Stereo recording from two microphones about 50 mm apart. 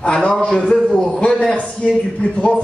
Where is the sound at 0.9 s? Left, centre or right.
Centre.